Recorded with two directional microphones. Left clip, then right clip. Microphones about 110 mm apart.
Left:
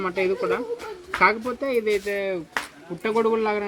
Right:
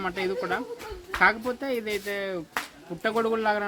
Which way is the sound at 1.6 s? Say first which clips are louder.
Left 9 dB; 30° right (ahead or behind).